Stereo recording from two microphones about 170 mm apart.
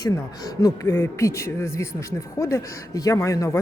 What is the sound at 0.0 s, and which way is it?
Speech, 20° left (ahead or behind).